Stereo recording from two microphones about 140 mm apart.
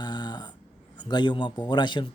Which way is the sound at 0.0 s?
30° left (ahead or behind).